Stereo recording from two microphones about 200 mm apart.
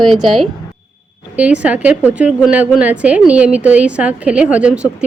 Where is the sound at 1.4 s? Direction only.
5° right (ahead or behind).